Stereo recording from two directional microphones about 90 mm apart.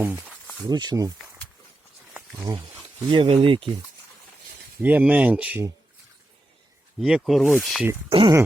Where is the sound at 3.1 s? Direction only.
70° right (ahead or behind).